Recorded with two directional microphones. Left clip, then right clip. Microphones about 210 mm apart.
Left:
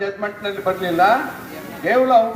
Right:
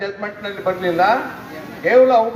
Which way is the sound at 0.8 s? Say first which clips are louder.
Even; 5° left (ahead or behind).